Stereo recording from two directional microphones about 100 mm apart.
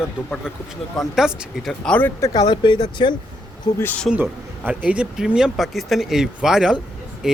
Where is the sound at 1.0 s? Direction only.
Centre (ahead or behind).